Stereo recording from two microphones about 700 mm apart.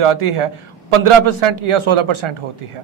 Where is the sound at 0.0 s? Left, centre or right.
Right.